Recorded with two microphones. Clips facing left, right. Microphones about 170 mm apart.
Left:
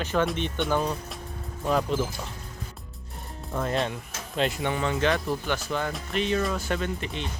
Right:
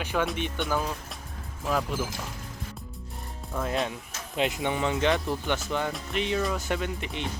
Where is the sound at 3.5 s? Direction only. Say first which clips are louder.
Left 2 dB; centre (ahead or behind).